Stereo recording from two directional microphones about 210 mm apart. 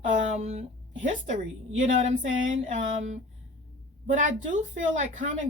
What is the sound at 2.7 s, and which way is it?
Speech, 35° right (ahead or behind).